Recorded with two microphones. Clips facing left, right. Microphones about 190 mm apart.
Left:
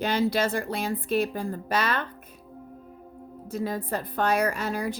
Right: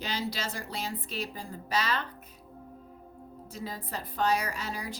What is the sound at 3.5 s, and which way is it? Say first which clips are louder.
A woman's voice: left 9 dB; 55° left (ahead or behind).